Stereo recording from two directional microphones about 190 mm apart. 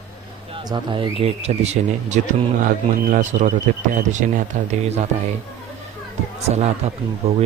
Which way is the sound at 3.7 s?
45° right (ahead or behind).